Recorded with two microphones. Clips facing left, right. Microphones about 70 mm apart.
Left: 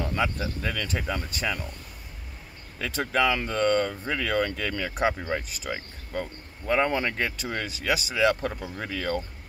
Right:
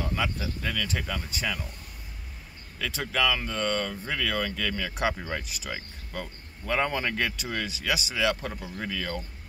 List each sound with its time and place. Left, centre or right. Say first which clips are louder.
0.1 s speech: left 3 dB; left
2.8 s speech: left 3 dB; left